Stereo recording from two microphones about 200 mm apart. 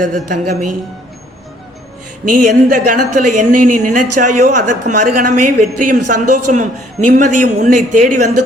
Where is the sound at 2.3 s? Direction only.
40° right (ahead or behind).